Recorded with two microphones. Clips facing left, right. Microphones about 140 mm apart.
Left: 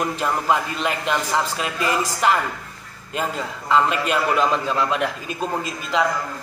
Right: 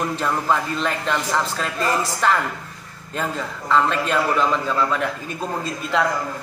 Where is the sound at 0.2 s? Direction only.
15° left (ahead or behind).